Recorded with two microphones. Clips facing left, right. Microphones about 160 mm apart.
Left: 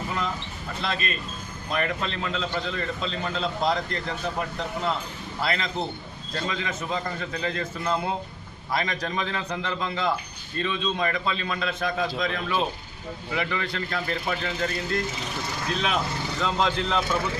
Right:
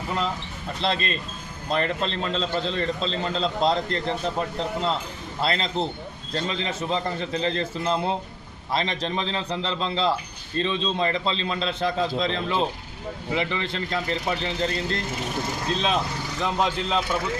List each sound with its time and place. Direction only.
0.8 s a man's voice: 30° right (ahead or behind)